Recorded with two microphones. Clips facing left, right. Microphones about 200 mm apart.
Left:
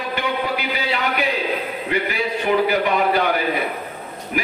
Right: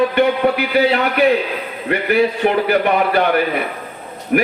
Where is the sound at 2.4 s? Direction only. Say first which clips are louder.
Even; 55° right (ahead or behind).